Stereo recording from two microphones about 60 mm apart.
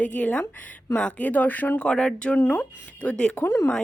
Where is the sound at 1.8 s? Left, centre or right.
Centre.